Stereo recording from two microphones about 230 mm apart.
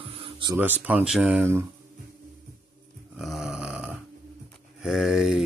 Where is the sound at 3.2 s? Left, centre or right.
Centre.